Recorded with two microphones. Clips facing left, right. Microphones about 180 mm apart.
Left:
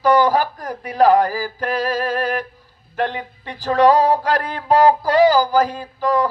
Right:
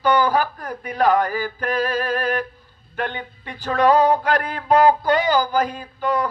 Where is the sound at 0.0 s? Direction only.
35° left (ahead or behind).